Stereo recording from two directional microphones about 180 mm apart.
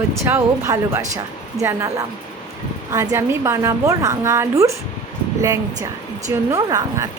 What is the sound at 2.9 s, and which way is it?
A woman's voice, 15° right (ahead or behind).